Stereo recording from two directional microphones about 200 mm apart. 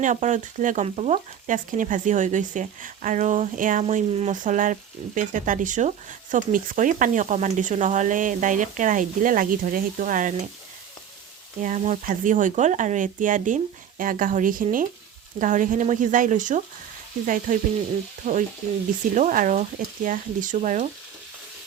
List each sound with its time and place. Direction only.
0.0 s frying: 40° right (ahead or behind)
11.6 s frying: 40° right (ahead or behind)
14.0 s speech: 45° right (ahead or behind)
15.4 s frying: 40° right (ahead or behind)